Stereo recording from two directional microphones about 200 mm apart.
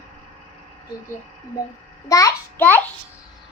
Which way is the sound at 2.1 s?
15° left (ahead or behind).